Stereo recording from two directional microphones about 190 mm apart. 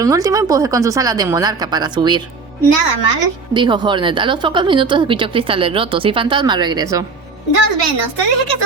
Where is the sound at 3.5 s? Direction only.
25° right (ahead or behind).